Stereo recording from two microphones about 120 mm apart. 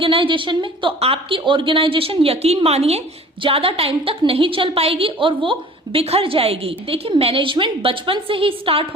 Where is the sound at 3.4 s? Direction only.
50° right (ahead or behind).